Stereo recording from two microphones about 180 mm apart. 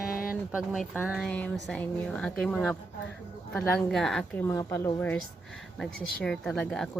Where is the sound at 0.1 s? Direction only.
50° left (ahead or behind).